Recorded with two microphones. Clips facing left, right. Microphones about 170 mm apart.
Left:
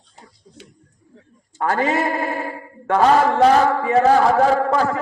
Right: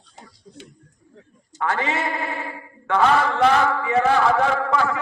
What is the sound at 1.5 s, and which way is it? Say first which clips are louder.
Speech: left 5 dB; 40° left (ahead or behind).